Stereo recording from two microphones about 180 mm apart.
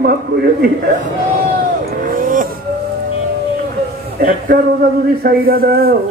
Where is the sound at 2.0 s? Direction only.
55° right (ahead or behind).